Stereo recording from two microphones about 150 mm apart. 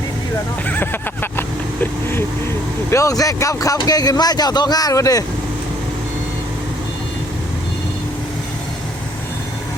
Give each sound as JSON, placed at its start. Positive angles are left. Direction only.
{"t": 0.7, "sound": "vehicle", "side_deg": 15}
{"t": 2.9, "sound": "a man's voice", "side_deg": 20}